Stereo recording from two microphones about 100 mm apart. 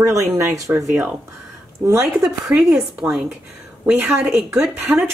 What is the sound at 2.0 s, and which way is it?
Speech, 5° right (ahead or behind).